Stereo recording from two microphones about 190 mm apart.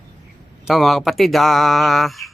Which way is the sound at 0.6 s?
Centre (ahead or behind).